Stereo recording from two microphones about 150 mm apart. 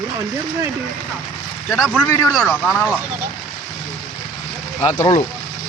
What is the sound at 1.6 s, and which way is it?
Speech, 5° right (ahead or behind).